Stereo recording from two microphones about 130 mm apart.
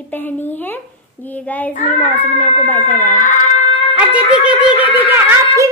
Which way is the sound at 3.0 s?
75° left (ahead or behind).